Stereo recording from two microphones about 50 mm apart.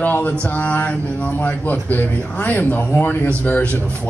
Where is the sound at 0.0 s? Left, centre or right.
Left.